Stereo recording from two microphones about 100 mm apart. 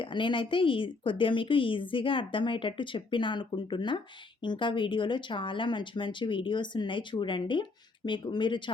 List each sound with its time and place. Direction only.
0.0 s speech: 55° left (ahead or behind)